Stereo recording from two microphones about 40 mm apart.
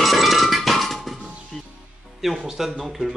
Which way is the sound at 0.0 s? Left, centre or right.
Centre.